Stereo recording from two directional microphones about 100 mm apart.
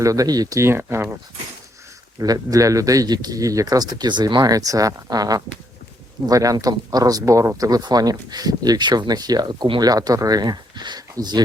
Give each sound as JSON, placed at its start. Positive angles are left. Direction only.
{"t": 0.0, "sound": "speech", "side_deg": -35}
{"t": 0.6, "sound": "speech", "side_deg": -25}
{"t": 2.1, "sound": "speech", "side_deg": -35}
{"t": 9.9, "sound": "speech", "side_deg": -40}